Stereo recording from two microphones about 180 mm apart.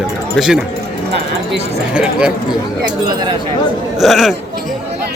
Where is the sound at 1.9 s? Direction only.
5° right (ahead or behind).